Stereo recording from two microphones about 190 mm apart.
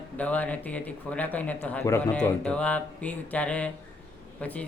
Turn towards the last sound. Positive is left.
turn(degrees=10)  # may be behind; listen again after turning